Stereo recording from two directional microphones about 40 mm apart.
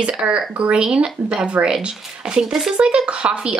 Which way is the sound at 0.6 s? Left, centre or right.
Right.